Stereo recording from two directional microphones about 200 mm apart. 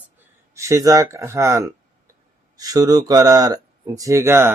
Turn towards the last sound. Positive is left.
turn(degrees=-10)  # may be behind; listen again after turning